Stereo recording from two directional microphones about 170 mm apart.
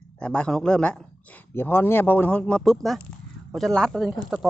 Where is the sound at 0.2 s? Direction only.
5° left (ahead or behind).